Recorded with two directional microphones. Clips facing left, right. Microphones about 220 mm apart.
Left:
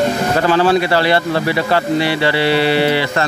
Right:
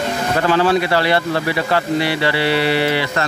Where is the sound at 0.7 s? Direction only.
30° left (ahead or behind).